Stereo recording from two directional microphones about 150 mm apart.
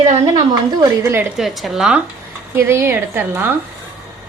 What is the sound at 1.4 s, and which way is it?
Speech, centre (ahead or behind).